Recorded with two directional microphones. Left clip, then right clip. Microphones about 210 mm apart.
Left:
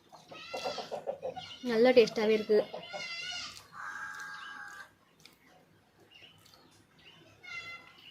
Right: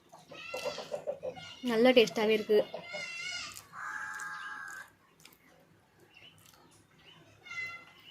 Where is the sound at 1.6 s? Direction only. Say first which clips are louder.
Left 1 dB; 10° right (ahead or behind).